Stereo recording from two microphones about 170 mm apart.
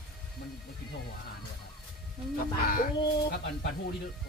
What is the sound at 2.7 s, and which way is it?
Speech, 60° left (ahead or behind).